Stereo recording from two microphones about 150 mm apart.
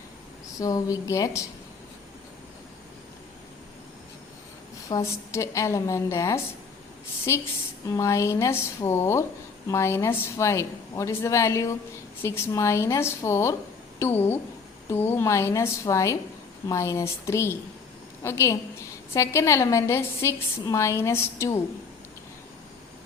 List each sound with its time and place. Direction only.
0.6 s a woman's voice: 25° left (ahead or behind)
4.9 s a woman's voice: 20° left (ahead or behind)